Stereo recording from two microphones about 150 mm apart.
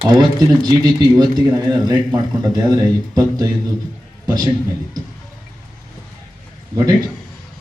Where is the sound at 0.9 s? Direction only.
25° right (ahead or behind).